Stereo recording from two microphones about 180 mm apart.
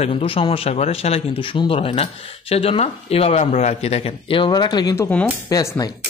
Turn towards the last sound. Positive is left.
turn(degrees=20)  # may be behind; listen again after turning